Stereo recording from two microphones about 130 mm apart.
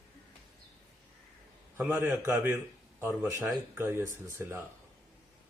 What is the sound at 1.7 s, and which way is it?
Speech, 15° right (ahead or behind).